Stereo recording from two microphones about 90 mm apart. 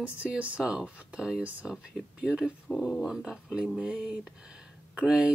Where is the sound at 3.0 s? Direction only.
5° right (ahead or behind).